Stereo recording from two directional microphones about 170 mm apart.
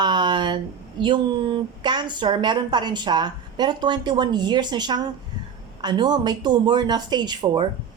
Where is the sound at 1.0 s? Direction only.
25° right (ahead or behind).